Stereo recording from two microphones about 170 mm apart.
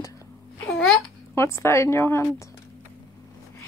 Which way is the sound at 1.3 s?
15° left (ahead or behind).